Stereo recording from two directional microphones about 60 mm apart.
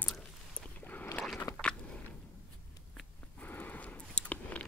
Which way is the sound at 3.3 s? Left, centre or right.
Left.